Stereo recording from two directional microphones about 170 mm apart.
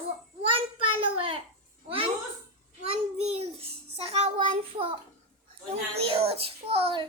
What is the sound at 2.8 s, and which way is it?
Child singing, 35° right (ahead or behind).